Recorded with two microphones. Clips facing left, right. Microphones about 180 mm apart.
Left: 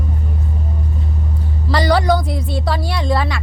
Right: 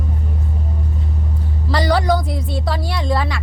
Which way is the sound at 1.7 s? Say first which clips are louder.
Left 2 dB; 75° left (ahead or behind).